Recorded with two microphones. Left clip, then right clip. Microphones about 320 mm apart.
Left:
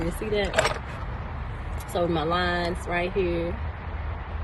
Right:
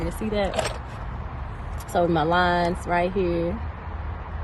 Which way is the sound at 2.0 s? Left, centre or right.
Right.